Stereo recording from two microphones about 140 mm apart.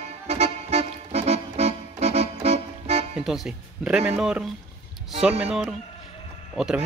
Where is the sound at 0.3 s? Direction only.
50° right (ahead or behind).